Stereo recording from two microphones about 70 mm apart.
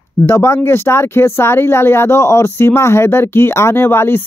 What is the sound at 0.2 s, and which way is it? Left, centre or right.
Speech, left.